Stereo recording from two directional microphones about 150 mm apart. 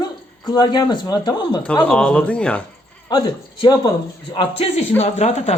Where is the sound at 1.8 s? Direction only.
5° left (ahead or behind).